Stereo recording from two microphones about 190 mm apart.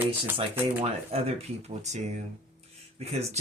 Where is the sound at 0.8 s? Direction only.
30° right (ahead or behind).